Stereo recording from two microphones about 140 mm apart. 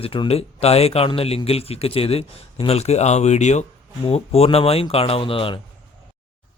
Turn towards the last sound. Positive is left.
turn(degrees=40)  # may be behind; listen again after turning